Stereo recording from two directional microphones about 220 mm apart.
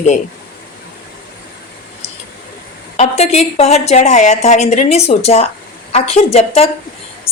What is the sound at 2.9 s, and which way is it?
A woman's voice, 30° left (ahead or behind).